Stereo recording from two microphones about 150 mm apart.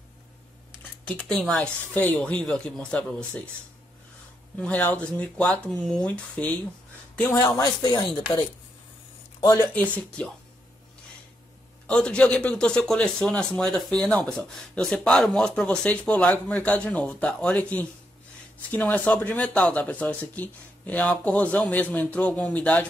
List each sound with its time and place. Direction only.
1.0 s speech: 5° left (ahead or behind)
4.6 s speech: 10° left (ahead or behind)
7.5 s speech: 25° left (ahead or behind)
9.6 s speech: 10° left (ahead or behind)
11.9 s speech: 5° left (ahead or behind)